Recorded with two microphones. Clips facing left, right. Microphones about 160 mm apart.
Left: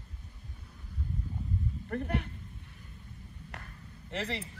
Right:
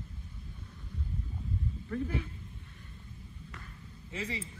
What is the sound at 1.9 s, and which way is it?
Speech, 65° left (ahead or behind).